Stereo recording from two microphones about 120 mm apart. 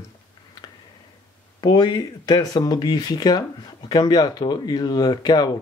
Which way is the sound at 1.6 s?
35° left (ahead or behind).